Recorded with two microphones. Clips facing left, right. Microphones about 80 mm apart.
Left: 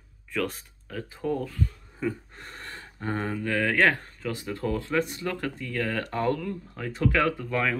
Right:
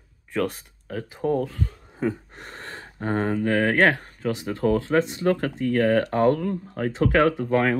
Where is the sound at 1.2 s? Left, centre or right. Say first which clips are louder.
Right 5 dB; right.